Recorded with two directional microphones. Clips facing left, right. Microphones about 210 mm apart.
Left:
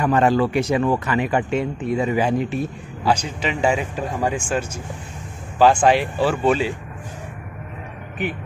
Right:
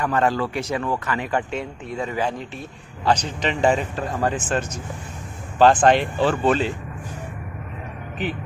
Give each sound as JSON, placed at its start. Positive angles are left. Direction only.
{"t": 0.0, "sound": "speech", "side_deg": 15}